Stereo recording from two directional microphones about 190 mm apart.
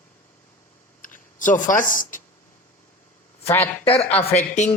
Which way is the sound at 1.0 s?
45° left (ahead or behind).